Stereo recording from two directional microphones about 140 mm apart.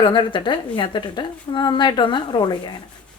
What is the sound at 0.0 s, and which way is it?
A woman's voice, 35° left (ahead or behind).